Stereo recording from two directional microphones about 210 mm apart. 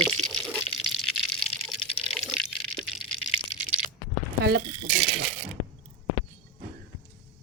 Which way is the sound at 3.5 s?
40° right (ahead or behind).